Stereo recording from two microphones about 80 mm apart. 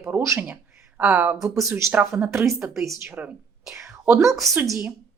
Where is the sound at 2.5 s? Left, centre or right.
Centre.